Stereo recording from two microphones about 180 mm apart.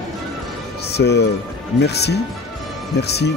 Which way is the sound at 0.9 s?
70° left (ahead or behind).